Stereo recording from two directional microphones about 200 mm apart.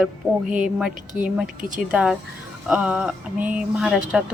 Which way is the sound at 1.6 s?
40° right (ahead or behind).